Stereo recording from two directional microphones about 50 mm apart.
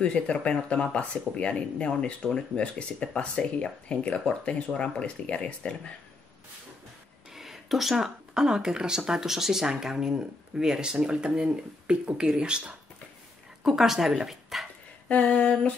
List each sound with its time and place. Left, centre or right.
0.0 s speech: left
7.3 s speech: centre
15.0 s speech: left